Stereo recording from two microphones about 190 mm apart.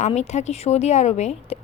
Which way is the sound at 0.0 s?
35° left (ahead or behind).